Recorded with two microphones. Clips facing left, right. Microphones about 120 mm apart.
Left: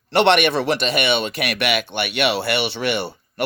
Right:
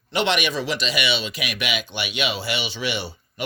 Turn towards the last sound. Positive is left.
turn(degrees=60)  # may be behind; listen again after turning